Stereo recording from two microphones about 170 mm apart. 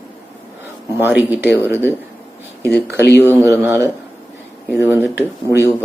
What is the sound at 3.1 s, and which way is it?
Speech, 15° right (ahead or behind).